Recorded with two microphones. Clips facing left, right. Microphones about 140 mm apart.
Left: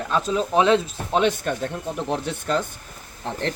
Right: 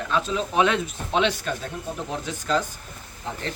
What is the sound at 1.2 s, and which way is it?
Speech, 50° left (ahead or behind).